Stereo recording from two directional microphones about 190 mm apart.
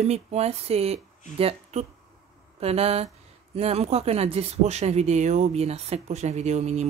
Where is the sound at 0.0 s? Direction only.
35° right (ahead or behind).